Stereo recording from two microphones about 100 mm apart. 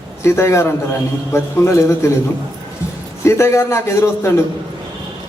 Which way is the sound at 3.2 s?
30° left (ahead or behind).